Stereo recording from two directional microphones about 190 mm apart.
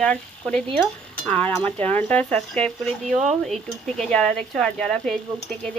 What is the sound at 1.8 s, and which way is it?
Speech, 35° right (ahead or behind).